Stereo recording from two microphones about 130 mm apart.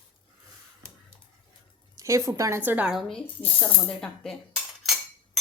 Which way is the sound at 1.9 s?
25° right (ahead or behind).